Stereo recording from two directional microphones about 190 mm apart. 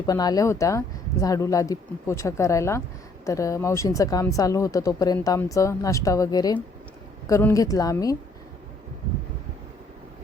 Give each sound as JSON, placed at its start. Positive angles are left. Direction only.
{"t": 0.0, "sound": "speech", "side_deg": 20}